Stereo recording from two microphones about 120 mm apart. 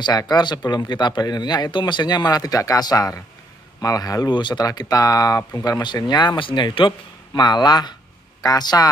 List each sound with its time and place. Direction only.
0.0 s speech: 35° left (ahead or behind)